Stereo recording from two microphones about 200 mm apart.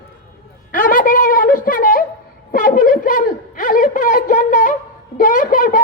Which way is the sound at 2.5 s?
40° left (ahead or behind).